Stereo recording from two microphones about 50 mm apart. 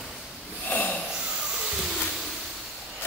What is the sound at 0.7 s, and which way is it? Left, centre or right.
Snort, left.